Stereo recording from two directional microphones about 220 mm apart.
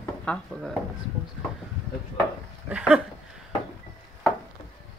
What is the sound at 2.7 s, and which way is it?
Speech, 5° right (ahead or behind).